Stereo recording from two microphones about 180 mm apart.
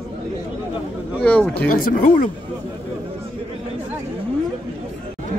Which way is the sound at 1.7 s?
50° left (ahead or behind).